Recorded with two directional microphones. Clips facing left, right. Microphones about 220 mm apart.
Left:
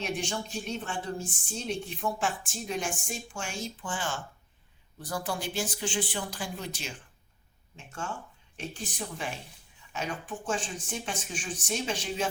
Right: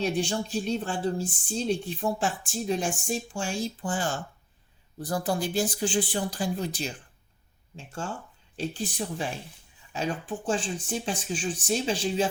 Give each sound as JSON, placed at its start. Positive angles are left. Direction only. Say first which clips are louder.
{"t": 0.0, "sound": "speech", "louder": "right 6 dB", "side_deg": -35}
{"t": 8.5, "sound": "speech", "louder": "right 6 dB", "side_deg": -35}